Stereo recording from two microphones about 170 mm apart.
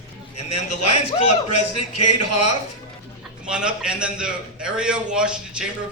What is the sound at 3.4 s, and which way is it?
A man's voice, 5° right (ahead or behind).